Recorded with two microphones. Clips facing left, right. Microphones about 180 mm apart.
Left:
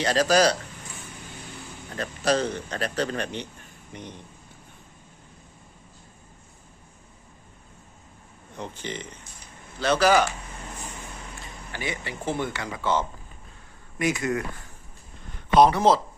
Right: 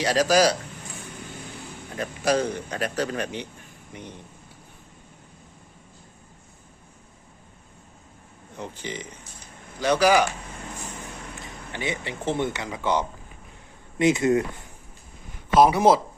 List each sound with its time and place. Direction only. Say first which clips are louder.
0.0 s speech: right 1 dB; 10° right (ahead or behind)
2.0 s speech: right 1 dB; 10° right (ahead or behind)
8.5 s speech: even; 10° right (ahead or behind)
11.7 s speech: right 3 dB; 20° right (ahead or behind)
15.5 s speech: right 1 dB; 10° right (ahead or behind)